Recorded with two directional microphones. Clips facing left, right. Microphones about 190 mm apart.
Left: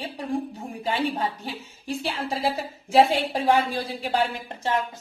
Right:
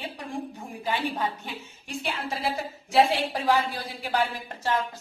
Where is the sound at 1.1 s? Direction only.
35° left (ahead or behind).